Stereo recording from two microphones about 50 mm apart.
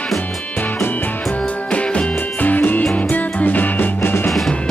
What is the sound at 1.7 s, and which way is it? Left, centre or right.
Music, left.